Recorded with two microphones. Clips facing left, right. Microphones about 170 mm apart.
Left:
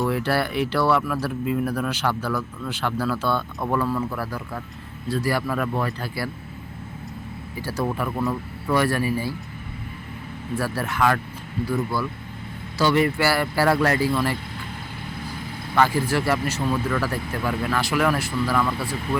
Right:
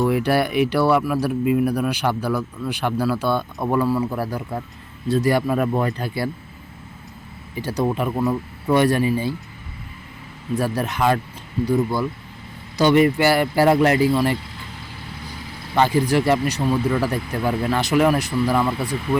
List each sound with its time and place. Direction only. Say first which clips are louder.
0.0 s speech: right 4 dB; 15° right (ahead or behind)
4.1 s speech: right 4 dB; 35° right (ahead or behind)
5.0 s speech: right 5 dB; 20° right (ahead or behind)
7.5 s speech: right 4 dB; 20° right (ahead or behind)
10.5 s speech: right 4 dB; 20° right (ahead or behind)
15.7 s speech: right 3 dB; 20° right (ahead or behind)